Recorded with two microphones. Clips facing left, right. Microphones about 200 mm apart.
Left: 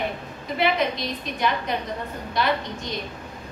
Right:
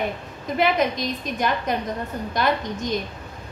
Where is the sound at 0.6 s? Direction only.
45° right (ahead or behind).